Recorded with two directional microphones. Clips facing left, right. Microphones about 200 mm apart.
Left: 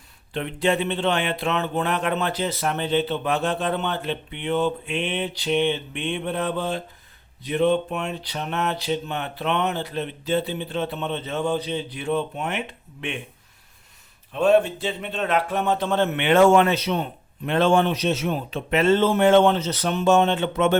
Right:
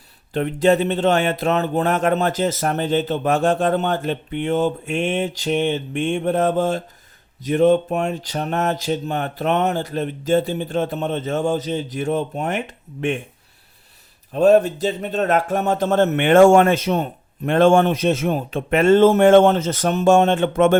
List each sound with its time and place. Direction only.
0.3 s speech: 45° right (ahead or behind)
14.3 s speech: 40° right (ahead or behind)